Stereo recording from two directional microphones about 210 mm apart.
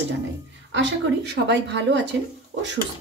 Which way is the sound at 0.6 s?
60° right (ahead or behind).